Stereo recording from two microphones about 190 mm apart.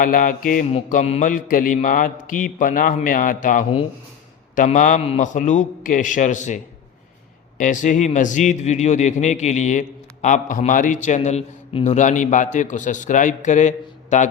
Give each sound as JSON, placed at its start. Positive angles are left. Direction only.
{"t": 0.0, "sound": "mantra", "side_deg": 45}
{"t": 4.5, "sound": "speech", "side_deg": 40}
{"t": 7.6, "sound": "speech", "side_deg": 45}